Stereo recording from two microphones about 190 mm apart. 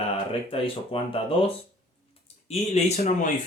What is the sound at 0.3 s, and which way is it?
Speech, 30° left (ahead or behind).